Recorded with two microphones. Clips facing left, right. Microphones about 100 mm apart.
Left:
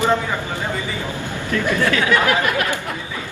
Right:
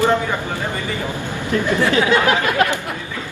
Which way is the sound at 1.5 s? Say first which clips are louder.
Right 2 dB; 20° right (ahead or behind).